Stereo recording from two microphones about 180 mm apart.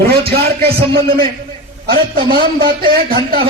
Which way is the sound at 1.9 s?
55° right (ahead or behind).